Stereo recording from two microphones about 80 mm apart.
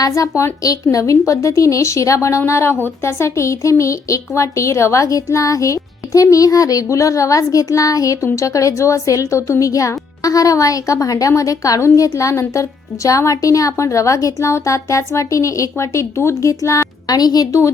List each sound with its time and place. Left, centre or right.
0.0 s speech: left
17.2 s a woman's voice: left